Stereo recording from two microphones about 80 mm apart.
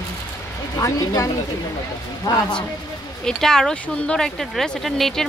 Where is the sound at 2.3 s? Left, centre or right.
Left.